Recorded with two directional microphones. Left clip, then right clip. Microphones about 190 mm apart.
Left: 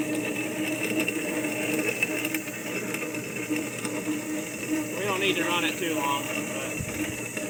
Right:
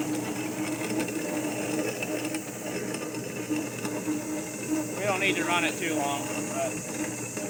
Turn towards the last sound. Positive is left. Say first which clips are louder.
# even
turn(degrees=-20)  # may be behind; listen again after turning